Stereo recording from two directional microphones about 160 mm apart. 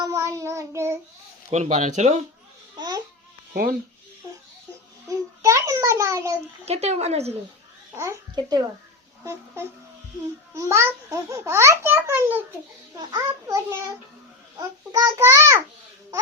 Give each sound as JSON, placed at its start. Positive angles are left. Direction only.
{"t": 0.0, "sound": "child singing", "side_deg": -20}
{"t": 1.5, "sound": "speech", "side_deg": -40}
{"t": 2.7, "sound": "babbling", "side_deg": -25}
{"t": 3.5, "sound": "speech", "side_deg": -65}
{"t": 5.0, "sound": "a child's voice", "side_deg": -20}
{"t": 6.7, "sound": "a woman's voice", "side_deg": -40}
{"t": 7.9, "sound": "a child's voice", "side_deg": -20}
{"t": 13.0, "sound": "a child's voice", "side_deg": -25}